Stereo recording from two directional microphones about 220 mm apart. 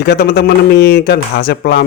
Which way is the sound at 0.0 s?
45° left (ahead or behind).